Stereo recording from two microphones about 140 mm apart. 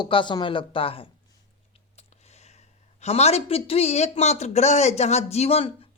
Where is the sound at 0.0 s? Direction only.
35° left (ahead or behind).